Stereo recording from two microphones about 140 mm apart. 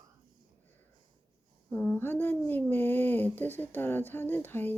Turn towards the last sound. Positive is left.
turn(degrees=15)  # may be behind; listen again after turning